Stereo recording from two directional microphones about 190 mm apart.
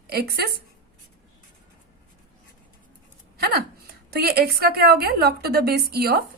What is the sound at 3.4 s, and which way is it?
A woman's voice, 55° right (ahead or behind).